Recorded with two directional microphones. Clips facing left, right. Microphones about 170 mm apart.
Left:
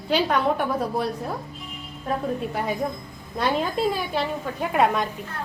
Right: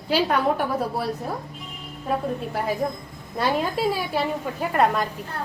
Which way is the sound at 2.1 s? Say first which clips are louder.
Even; centre (ahead or behind).